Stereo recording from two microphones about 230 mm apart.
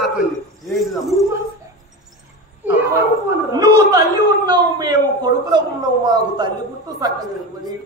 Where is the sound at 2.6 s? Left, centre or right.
Centre.